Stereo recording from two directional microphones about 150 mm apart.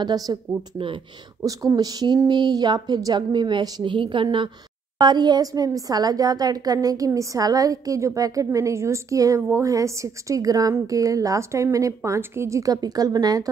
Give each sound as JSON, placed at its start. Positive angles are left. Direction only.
{"t": 0.0, "sound": "speech", "side_deg": -25}
{"t": 1.4, "sound": "a woman's voice", "side_deg": -25}